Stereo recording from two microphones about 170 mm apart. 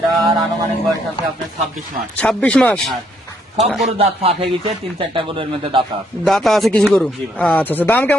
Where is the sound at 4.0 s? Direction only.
35° right (ahead or behind).